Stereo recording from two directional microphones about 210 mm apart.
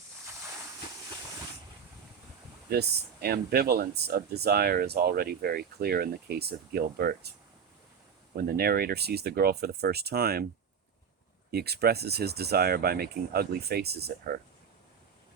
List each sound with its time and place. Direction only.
2.6 s speech: 50° right (ahead or behind)
8.4 s speech: 45° right (ahead or behind)
11.5 s speech: 50° right (ahead or behind)